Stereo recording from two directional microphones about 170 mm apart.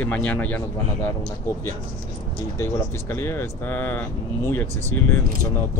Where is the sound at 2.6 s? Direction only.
15° left (ahead or behind).